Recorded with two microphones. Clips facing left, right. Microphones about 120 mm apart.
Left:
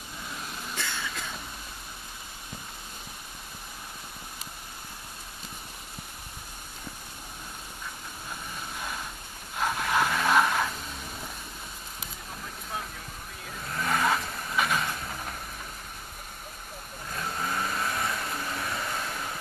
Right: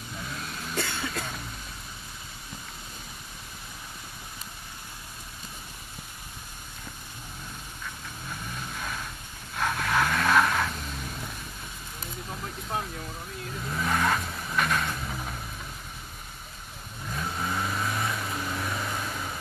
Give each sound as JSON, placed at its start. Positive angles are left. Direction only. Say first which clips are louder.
{"t": 0.3, "sound": "cough", "louder": "even", "side_deg": 10}
{"t": 0.7, "sound": "cough", "louder": "right 5 dB", "side_deg": -55}
{"t": 8.7, "sound": "vehicle", "louder": "even", "side_deg": 10}
{"t": 13.7, "sound": "vehicle", "louder": "even", "side_deg": 0}
{"t": 17.1, "sound": "vehicle", "louder": "right 1 dB", "side_deg": 0}